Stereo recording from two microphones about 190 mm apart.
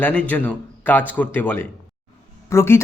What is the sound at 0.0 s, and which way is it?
A man's voice, 10° left (ahead or behind).